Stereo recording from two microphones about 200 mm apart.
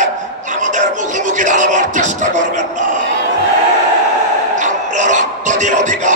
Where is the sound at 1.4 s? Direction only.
40° right (ahead or behind).